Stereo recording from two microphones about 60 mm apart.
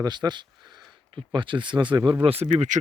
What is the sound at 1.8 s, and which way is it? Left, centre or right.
Speech, right.